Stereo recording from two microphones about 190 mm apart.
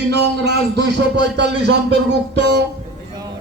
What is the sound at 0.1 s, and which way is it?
Speech, 65° right (ahead or behind).